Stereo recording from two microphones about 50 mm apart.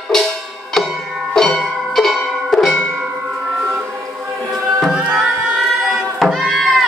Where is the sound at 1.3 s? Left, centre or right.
Centre.